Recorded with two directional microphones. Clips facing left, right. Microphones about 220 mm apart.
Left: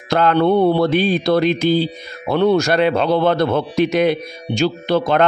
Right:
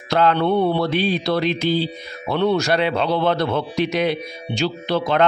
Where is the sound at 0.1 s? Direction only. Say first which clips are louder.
Left 3 dB; 50° left (ahead or behind).